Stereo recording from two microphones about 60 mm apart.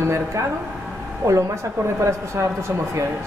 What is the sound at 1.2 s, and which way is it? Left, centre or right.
Speech, right.